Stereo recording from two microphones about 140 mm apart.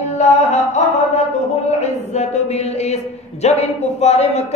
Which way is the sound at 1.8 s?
50° left (ahead or behind).